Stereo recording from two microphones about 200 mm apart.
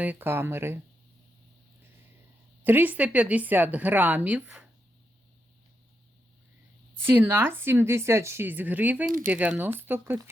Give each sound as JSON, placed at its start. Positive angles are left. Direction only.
{"t": 0.0, "sound": "speech", "side_deg": -10}
{"t": 2.6, "sound": "speech", "side_deg": -10}
{"t": 7.0, "sound": "speech", "side_deg": -10}